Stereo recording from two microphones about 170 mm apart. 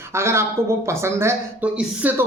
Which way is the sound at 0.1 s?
15° right (ahead or behind).